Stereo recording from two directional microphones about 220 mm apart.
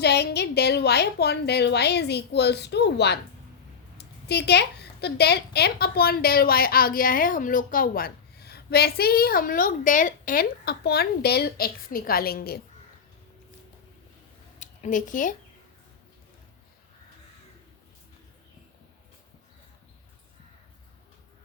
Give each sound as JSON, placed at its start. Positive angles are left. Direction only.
{"t": 0.0, "sound": "a woman's voice", "side_deg": 50}
{"t": 14.6, "sound": "speech", "side_deg": 35}